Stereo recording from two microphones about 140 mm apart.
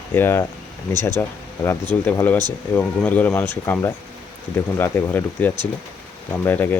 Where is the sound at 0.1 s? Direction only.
15° left (ahead or behind).